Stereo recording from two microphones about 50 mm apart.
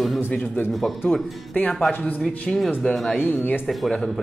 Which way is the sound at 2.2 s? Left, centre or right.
Centre.